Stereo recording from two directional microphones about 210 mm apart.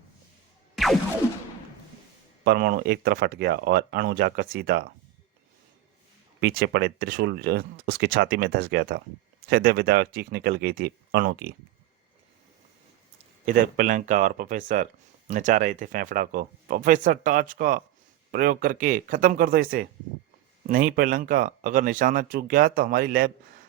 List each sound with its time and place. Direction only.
0.8 s music: centre (ahead or behind)
2.4 s speech: 50° right (ahead or behind)
6.4 s speech: 50° right (ahead or behind)
13.4 s speech: 40° right (ahead or behind)